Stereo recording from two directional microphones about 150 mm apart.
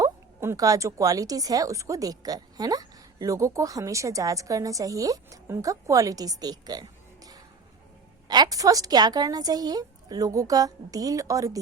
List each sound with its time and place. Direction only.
0.0 s a woman's voice: 20° right (ahead or behind)
8.3 s a woman's voice: 25° right (ahead or behind)